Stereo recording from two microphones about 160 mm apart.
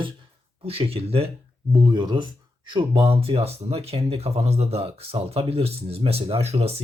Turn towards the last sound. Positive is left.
turn(degrees=-40)  # may be behind; listen again after turning